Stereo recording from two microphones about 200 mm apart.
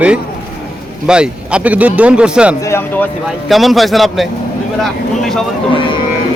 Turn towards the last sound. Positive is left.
turn(degrees=25)  # may be behind; listen again after turning